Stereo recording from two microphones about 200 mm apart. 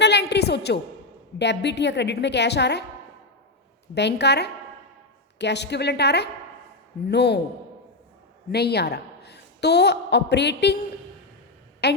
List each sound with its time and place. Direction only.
0.0 s a sound: 60° left (ahead or behind)
1.4 s a woman's voice: 60° left (ahead or behind)
3.9 s a woman's voice: 60° left (ahead or behind)
8.4 s a woman's voice: 55° left (ahead or behind)
11.8 s a woman's voice: 55° left (ahead or behind)